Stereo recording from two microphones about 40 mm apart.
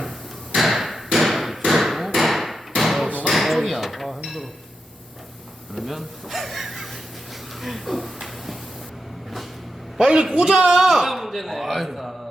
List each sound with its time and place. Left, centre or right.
0.5 s hammer: centre
3.2 s a sound: centre
5.7 s speech: centre
7.6 s a sound: centre
10.0 s a man's voice: centre
10.8 s speech: centre